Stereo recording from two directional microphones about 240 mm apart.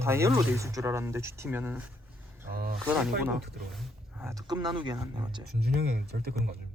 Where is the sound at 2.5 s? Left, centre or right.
Right.